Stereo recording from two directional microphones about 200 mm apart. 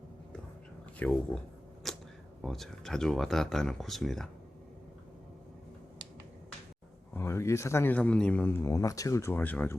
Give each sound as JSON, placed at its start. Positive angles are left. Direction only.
{"t": 1.0, "sound": "a man's voice", "side_deg": 10}
{"t": 1.8, "sound": "arrow", "side_deg": 0}
{"t": 2.4, "sound": "speech", "side_deg": 0}
{"t": 7.1, "sound": "a man's voice", "side_deg": 15}